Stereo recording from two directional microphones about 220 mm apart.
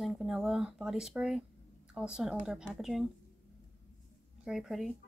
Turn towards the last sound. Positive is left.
turn(degrees=0)  # may be behind; listen again after turning